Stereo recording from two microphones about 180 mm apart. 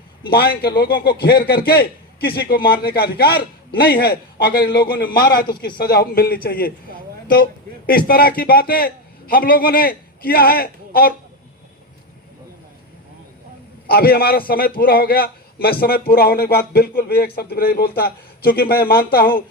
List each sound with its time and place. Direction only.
0.3 s a man's voice: 60° left (ahead or behind)
7.9 s a man's voice: 55° left (ahead or behind)
13.8 s a man's voice: 60° left (ahead or behind)